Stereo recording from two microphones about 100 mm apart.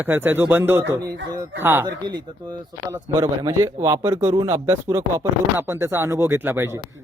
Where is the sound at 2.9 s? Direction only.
35° right (ahead or behind).